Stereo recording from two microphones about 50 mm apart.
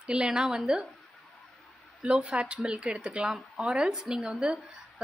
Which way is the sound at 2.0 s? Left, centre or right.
Right.